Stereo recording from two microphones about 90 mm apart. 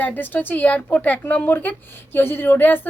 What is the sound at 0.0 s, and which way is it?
A woman's voice, 20° left (ahead or behind).